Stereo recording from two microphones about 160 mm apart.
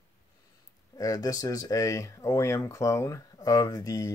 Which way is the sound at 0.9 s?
20° left (ahead or behind).